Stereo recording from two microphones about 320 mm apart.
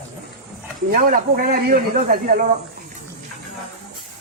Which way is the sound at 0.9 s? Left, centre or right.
Right.